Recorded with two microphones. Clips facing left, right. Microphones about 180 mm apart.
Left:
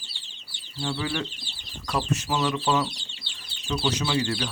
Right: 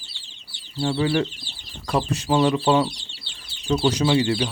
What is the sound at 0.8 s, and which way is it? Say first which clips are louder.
Speech: right 8 dB; 30° right (ahead or behind).